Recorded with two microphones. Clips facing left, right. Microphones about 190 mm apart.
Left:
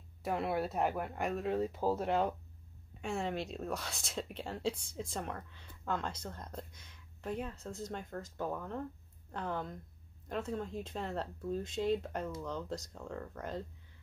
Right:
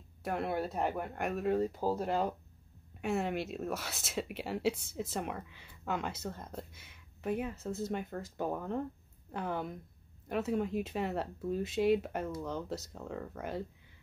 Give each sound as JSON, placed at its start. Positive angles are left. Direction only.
{"t": 0.2, "sound": "speech", "side_deg": 0}
{"t": 8.5, "sound": "speech", "side_deg": -20}
{"t": 9.3, "sound": "speech", "side_deg": -10}